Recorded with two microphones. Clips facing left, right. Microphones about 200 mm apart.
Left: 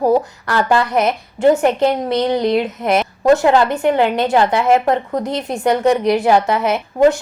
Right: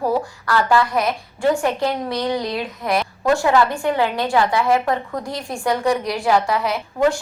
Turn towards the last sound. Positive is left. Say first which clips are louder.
# left 6 dB
turn(degrees=20)  # may be behind; listen again after turning